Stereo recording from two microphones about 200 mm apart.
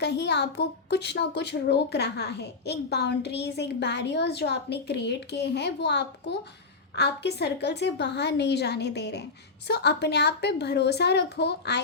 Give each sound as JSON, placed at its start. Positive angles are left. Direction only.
{"t": 0.0, "sound": "a woman's voice", "side_deg": 60}